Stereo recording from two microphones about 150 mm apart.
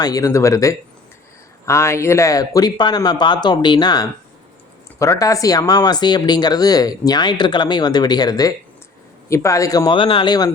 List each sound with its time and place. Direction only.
0.0 s speech: 25° left (ahead or behind)